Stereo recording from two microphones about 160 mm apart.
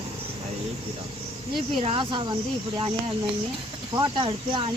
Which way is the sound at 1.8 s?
35° right (ahead or behind).